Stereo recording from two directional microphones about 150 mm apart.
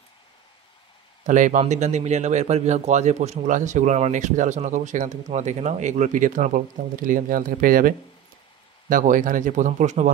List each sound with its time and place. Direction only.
1.2 s speech: 60° right (ahead or behind)